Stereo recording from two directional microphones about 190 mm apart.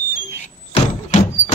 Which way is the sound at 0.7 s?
35° left (ahead or behind).